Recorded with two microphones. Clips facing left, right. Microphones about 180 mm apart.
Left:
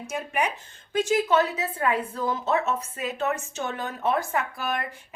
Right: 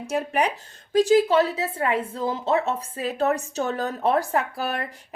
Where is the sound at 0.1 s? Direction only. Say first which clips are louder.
Right 4 dB; 35° right (ahead or behind).